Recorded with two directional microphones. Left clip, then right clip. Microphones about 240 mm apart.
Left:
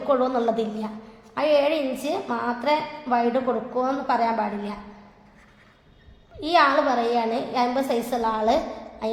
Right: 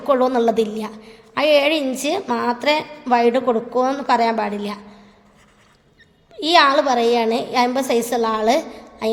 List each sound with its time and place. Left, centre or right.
0.1 s a woman's voice: right
6.4 s a woman's voice: right